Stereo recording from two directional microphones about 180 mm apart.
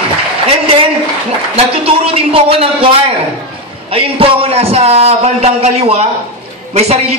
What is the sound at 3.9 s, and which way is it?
A man's voice, 30° right (ahead or behind).